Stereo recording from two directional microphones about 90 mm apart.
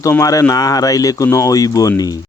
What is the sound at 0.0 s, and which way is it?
A man's voice, 35° left (ahead or behind).